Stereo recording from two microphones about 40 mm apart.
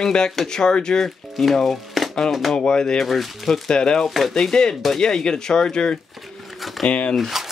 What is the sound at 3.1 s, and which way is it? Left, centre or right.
Speech, centre.